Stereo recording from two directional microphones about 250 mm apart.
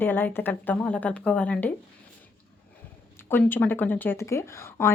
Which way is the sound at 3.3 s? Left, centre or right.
Centre.